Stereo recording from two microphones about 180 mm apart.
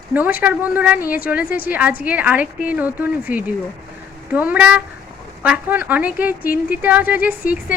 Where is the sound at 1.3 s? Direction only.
10° right (ahead or behind).